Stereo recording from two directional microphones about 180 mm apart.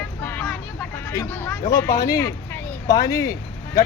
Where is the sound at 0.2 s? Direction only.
10° left (ahead or behind).